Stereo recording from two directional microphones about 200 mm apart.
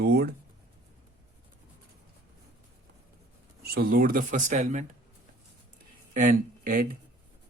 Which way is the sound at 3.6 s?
50° right (ahead or behind).